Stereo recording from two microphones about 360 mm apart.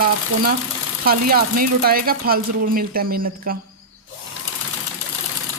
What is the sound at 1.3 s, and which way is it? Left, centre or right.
Speech, right.